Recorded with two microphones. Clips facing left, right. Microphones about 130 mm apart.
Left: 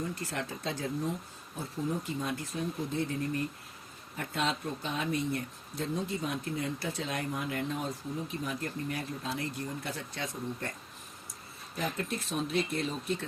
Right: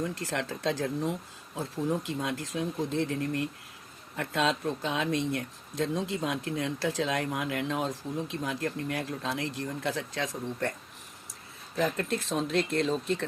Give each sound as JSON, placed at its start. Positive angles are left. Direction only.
{"t": 0.0, "sound": "speech", "side_deg": -80}
{"t": 4.2, "sound": "speech", "side_deg": -90}
{"t": 11.8, "sound": "speech", "side_deg": -90}